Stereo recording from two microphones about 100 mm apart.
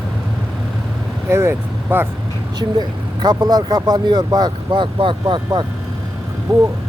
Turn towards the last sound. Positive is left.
turn(degrees=-50)  # may be behind; listen again after turning